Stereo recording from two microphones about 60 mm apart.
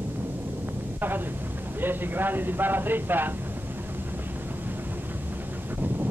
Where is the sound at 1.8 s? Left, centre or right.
Right.